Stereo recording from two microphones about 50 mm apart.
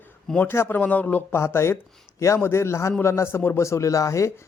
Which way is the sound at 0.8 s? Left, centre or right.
Left.